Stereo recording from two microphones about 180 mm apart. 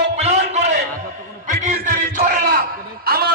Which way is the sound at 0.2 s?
40° right (ahead or behind).